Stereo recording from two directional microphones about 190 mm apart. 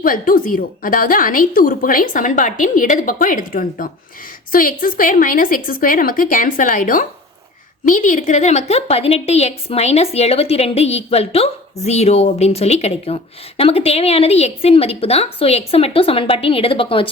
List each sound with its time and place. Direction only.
0.0 s a woman's voice: 45° left (ahead or behind); by 17.1 s 30° left (ahead or behind)